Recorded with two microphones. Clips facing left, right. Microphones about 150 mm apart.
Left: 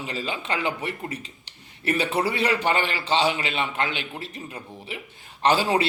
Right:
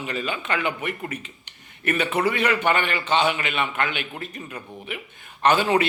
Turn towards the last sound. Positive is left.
turn(degrees=30)  # may be behind; listen again after turning